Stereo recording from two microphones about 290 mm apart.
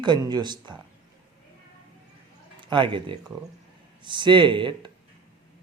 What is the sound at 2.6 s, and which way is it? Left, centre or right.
Speech, centre.